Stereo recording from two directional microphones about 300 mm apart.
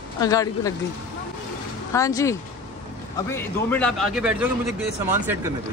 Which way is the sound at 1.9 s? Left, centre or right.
Centre.